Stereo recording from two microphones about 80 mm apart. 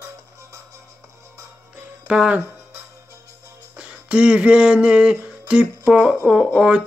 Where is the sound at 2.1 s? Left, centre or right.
Centre.